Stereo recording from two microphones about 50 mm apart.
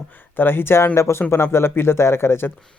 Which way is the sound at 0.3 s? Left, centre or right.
Left.